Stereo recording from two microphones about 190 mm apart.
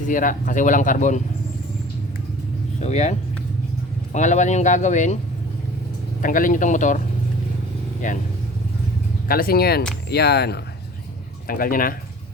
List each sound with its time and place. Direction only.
0.1 s speech: 45° left (ahead or behind)
2.8 s speech: 35° left (ahead or behind)
6.2 s speech: 45° left (ahead or behind)
8.0 s speech: 45° left (ahead or behind)
9.2 s speech: 50° left (ahead or behind)